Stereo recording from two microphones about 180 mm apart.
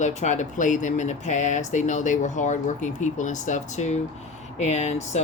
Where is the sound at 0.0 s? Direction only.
40° left (ahead or behind).